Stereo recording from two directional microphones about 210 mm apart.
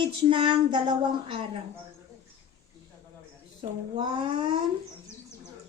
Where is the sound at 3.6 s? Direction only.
25° right (ahead or behind).